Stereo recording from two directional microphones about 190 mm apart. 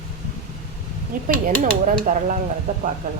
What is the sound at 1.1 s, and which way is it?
A woman's voice, 45° right (ahead or behind).